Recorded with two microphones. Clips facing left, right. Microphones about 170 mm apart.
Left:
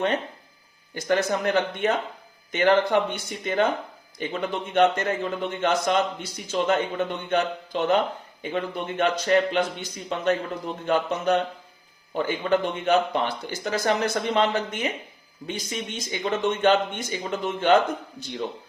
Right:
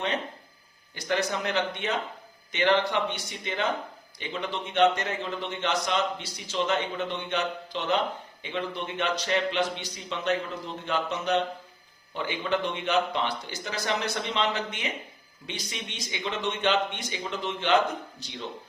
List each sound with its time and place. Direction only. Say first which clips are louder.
0.9 s a man's voice: left 5 dB; 50° left (ahead or behind)